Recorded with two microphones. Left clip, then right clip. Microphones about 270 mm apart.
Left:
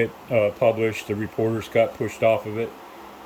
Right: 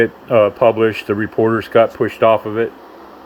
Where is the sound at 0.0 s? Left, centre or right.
Right.